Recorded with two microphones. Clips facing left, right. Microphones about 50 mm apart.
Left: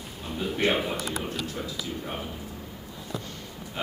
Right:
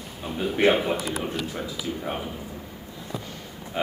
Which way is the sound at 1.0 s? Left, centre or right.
Centre.